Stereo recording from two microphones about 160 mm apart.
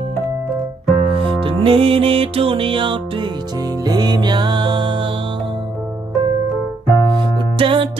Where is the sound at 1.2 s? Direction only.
35° right (ahead or behind).